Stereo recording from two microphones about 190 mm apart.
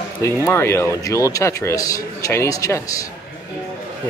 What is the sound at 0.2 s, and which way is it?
A man's voice, 15° left (ahead or behind).